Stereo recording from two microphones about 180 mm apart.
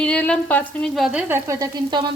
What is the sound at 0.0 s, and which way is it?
Speech, 5° left (ahead or behind).